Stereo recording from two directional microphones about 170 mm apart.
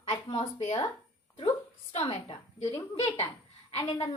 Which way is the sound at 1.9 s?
40° left (ahead or behind).